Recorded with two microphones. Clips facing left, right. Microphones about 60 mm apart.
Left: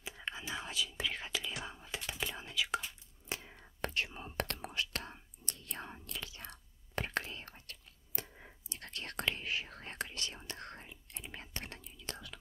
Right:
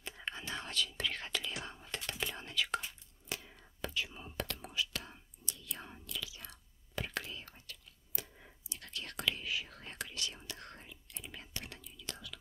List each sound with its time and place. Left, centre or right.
0.0 s whispering: centre
3.3 s whispering: left
3.8 s whispering: left
8.6 s whispering: left